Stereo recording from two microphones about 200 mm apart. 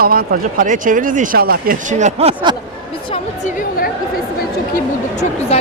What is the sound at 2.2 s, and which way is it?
Speech, 30° right (ahead or behind).